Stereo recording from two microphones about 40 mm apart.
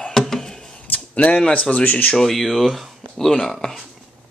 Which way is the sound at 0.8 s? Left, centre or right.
Left.